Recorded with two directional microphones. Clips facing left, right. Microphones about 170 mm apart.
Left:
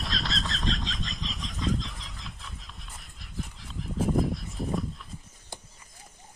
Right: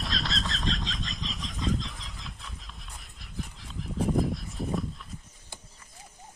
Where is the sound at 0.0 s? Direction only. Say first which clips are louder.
Even; centre (ahead or behind).